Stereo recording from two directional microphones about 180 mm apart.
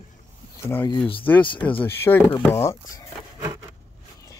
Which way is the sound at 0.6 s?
10° left (ahead or behind).